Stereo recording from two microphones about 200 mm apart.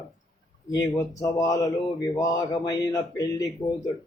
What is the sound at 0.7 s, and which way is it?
Speech, 15° left (ahead or behind).